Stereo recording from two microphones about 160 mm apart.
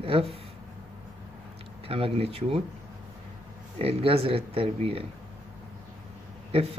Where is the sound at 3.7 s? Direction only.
35° right (ahead or behind).